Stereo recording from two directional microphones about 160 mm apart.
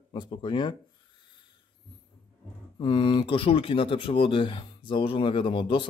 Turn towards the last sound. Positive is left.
turn(degrees=30)  # may be behind; listen again after turning